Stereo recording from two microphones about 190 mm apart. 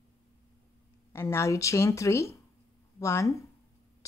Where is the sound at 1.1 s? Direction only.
15° left (ahead or behind).